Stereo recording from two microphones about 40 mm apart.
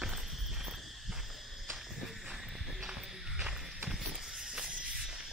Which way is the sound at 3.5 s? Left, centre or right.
Centre.